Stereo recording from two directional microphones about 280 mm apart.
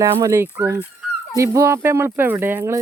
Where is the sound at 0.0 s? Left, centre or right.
Centre.